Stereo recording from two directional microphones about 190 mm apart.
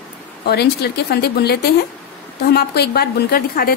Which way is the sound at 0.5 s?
60° left (ahead or behind).